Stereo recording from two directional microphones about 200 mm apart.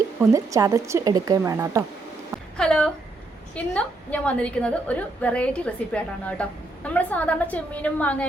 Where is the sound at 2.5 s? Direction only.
5° left (ahead or behind).